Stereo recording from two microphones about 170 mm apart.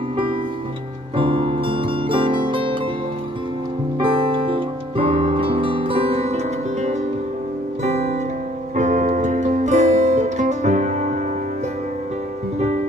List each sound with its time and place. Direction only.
1.1 s music: 30° right (ahead or behind)
3.9 s music: 30° right (ahead or behind)
7.9 s music: 40° right (ahead or behind)